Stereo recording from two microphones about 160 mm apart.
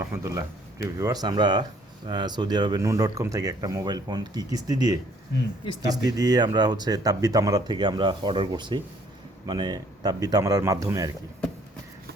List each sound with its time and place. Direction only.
0.0 s speech: 20° right (ahead or behind)